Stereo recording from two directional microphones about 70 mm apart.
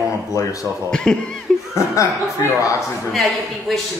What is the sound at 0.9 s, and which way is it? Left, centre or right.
Speech, centre.